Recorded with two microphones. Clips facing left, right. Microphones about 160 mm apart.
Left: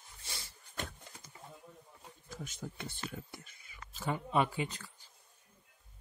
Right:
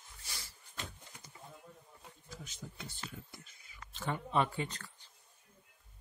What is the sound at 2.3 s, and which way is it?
Speech, 55° left (ahead or behind).